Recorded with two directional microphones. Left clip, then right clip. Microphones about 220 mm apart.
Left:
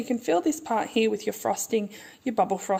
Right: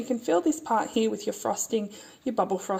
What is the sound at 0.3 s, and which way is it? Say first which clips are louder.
Speech: even; 30° left (ahead or behind).